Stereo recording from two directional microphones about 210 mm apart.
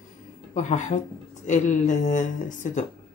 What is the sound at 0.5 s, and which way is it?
Speech, 35° left (ahead or behind).